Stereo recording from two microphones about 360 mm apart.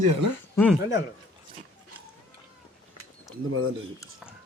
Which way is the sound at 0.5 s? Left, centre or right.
Centre.